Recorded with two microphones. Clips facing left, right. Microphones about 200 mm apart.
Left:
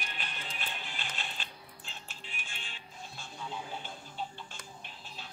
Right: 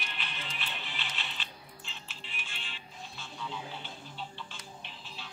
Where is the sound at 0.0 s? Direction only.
45° left (ahead or behind).